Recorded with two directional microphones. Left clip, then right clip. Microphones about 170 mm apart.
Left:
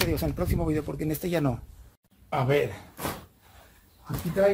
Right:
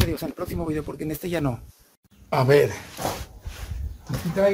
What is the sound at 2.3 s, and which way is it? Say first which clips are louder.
Speech: right 7 dB; 30° right (ahead or behind).